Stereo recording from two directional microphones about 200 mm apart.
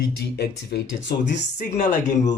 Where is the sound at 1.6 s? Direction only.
35° left (ahead or behind).